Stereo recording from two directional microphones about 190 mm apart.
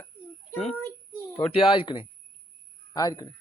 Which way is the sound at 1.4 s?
30° left (ahead or behind).